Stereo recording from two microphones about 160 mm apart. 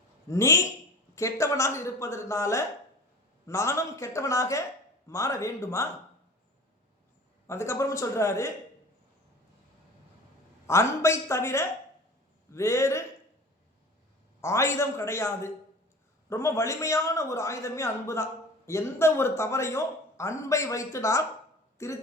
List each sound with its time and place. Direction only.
0.3 s a man's voice: 20° left (ahead or behind)
7.4 s a man's voice: 15° left (ahead or behind)
10.7 s a man's voice: 15° left (ahead or behind)
14.4 s a man's voice: 15° left (ahead or behind)